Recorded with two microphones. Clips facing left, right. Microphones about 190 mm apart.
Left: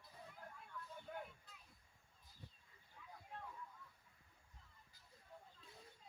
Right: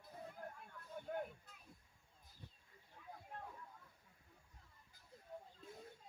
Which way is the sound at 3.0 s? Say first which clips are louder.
Right 5 dB; 50° right (ahead or behind).